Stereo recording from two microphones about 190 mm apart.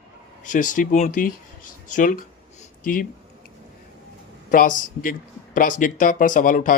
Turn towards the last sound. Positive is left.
turn(degrees=45)  # may be behind; listen again after turning